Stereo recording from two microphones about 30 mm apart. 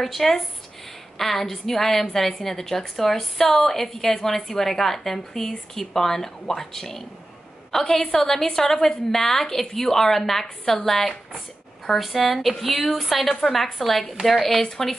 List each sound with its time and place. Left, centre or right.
0.0 s a woman's voice: centre